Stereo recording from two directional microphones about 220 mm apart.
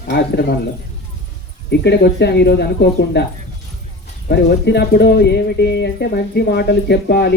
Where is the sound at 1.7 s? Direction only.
50° left (ahead or behind).